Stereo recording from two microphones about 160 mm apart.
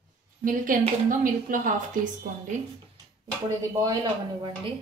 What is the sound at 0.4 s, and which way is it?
A woman's voice, 60° right (ahead or behind).